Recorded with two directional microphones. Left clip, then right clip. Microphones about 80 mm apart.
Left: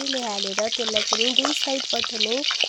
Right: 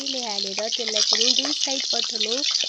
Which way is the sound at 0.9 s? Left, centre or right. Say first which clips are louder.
Right 2 dB; left.